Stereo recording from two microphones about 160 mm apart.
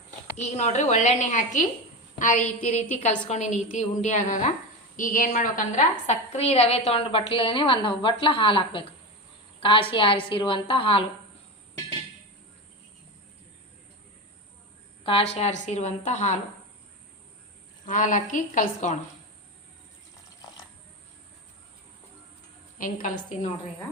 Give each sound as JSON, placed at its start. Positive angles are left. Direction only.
{"t": 0.3, "sound": "a woman's voice", "side_deg": 45}
{"t": 15.0, "sound": "a woman's voice", "side_deg": 40}
{"t": 17.8, "sound": "a woman's voice", "side_deg": 55}
{"t": 22.8, "sound": "a woman's voice", "side_deg": 55}